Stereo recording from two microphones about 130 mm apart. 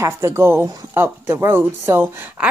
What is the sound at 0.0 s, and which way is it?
A woman's voice, 20° right (ahead or behind).